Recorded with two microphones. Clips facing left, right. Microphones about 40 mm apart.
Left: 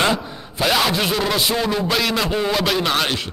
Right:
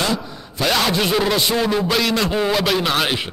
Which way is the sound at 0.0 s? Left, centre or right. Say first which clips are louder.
Left 3 dB; left.